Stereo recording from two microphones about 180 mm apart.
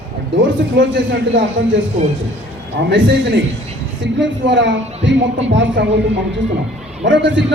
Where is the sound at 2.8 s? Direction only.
85° right.